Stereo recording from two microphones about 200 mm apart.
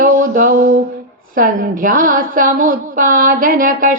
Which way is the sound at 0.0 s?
45° right (ahead or behind).